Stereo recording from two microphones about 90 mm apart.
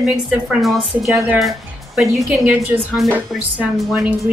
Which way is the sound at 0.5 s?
Centre (ahead or behind).